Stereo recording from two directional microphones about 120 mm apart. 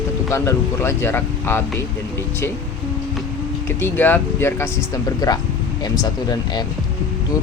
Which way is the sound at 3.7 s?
20° left (ahead or behind).